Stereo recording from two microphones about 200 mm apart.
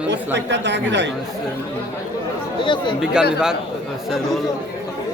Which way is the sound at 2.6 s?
25° left (ahead or behind).